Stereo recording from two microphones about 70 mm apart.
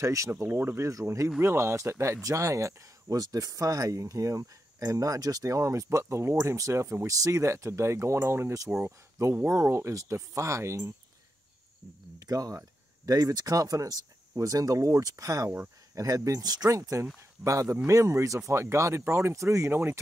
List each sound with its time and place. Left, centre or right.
0.0 s speech: right
0.8 s speech: right
12.2 s speech: right